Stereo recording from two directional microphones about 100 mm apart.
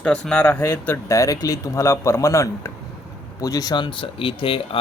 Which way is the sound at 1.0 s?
30° left (ahead or behind).